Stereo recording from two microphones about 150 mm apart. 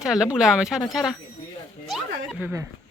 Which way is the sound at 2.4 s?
20° right (ahead or behind).